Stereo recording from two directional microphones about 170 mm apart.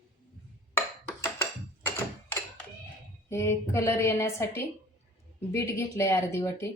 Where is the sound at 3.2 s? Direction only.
15° left (ahead or behind).